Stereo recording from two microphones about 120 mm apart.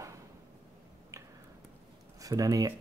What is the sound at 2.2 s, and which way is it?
Speech, 30° right (ahead or behind).